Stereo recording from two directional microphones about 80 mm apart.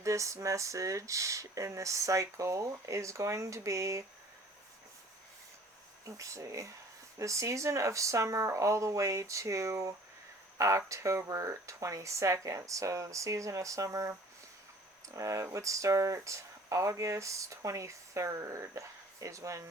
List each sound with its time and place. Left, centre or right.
0.0 s speech: right
6.1 s speech: right
15.1 s speech: right